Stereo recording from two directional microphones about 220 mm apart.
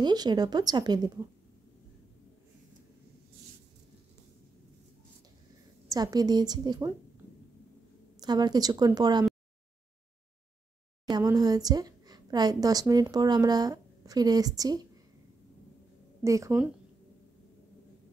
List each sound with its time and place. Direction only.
0.0 s speech: 20° right (ahead or behind)
5.9 s speech: 15° right (ahead or behind)
8.2 s speech: 20° right (ahead or behind)
11.1 s speech: 20° right (ahead or behind)
16.3 s speech: 15° right (ahead or behind)